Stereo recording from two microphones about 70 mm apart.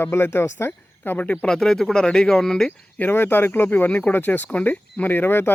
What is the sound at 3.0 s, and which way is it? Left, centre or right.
Speech, left.